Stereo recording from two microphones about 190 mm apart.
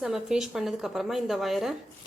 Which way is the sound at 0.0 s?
Centre (ahead or behind).